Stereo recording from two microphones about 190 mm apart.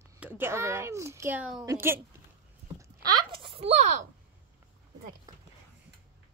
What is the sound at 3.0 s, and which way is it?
A child's voice, 25° right (ahead or behind).